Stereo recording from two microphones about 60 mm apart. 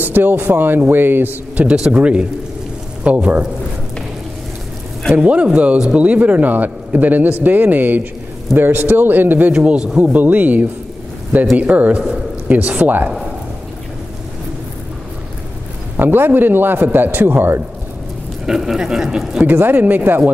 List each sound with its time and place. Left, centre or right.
0.0 s a man's voice: right
1.6 s speech: centre
5.1 s a man's voice: right
9.5 s speech: centre
16.0 s a man's voice: right
18.4 s speech: centre
19.4 s a man's voice: right